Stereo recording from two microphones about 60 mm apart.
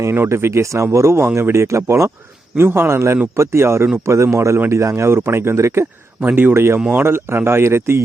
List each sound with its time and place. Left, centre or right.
0.0 s speech: right
2.6 s speech: right
6.2 s speech: right
6.5 s speech: right